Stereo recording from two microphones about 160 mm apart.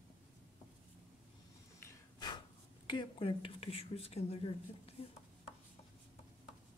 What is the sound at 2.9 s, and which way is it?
Speech, 30° left (ahead or behind).